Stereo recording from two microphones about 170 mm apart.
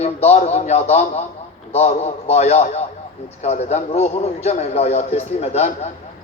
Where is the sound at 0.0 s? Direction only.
40° left (ahead or behind).